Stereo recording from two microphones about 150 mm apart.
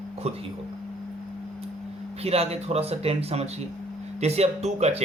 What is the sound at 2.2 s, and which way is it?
Speech, 45° right (ahead or behind).